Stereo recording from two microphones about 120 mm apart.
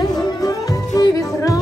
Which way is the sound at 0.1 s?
30° left (ahead or behind).